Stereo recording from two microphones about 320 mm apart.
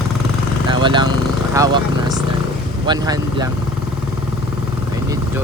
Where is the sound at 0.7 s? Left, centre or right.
Centre.